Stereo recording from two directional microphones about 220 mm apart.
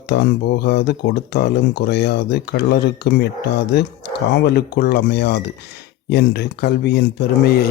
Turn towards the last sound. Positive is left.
turn(degrees=45)  # may be behind; listen again after turning